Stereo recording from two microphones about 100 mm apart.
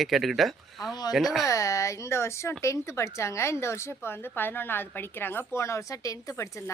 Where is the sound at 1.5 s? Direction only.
30° left (ahead or behind).